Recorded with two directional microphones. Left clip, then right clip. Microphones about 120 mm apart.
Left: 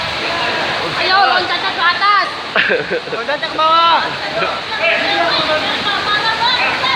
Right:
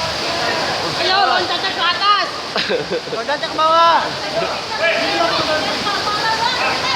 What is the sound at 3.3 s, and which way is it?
Speech, 25° right (ahead or behind).